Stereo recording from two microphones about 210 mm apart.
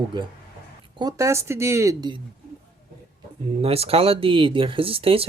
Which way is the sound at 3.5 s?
30° right (ahead or behind).